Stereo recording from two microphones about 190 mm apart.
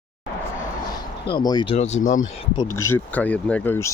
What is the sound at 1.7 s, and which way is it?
Speech, 35° left (ahead or behind).